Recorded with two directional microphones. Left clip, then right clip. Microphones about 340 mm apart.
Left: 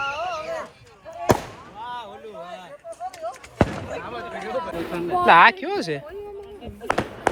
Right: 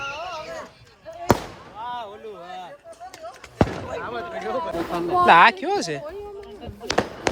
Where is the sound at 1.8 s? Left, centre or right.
Right.